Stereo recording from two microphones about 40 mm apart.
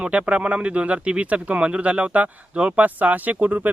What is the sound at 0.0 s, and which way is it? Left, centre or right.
Speech, right.